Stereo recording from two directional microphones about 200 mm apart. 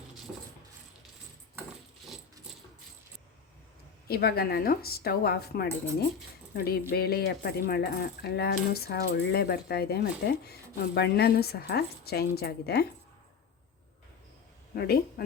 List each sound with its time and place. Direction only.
4.1 s cutlery: 50° left (ahead or behind)
6.5 s speech: 50° left (ahead or behind)
6.9 s cutlery: 50° left (ahead or behind)
14.7 s cutlery: 50° left (ahead or behind)